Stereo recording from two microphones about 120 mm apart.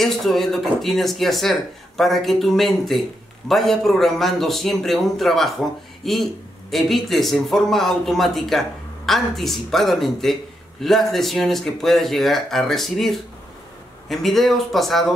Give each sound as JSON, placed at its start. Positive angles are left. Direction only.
{"t": 0.0, "sound": "speech", "side_deg": 0}